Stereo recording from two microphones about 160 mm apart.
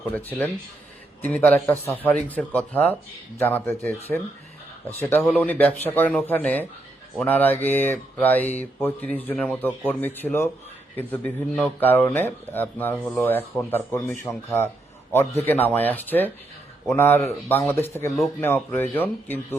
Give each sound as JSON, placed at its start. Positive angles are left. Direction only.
{"t": 0.1, "sound": "speech", "side_deg": 10}